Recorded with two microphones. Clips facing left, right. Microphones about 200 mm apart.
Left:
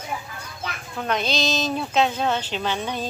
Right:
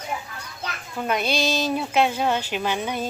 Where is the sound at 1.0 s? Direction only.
10° right (ahead or behind).